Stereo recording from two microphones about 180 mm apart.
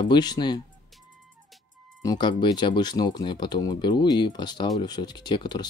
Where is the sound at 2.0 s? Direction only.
25° left (ahead or behind).